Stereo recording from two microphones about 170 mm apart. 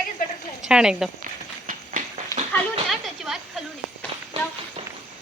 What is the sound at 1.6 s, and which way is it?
Run, 50° right (ahead or behind).